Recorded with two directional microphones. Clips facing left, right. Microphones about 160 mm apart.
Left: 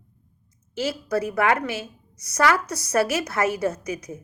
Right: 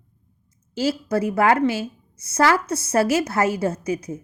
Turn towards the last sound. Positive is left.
turn(degrees=-30)  # may be behind; listen again after turning